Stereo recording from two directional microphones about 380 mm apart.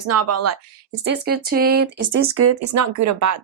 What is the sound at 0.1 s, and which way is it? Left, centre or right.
Speech, right.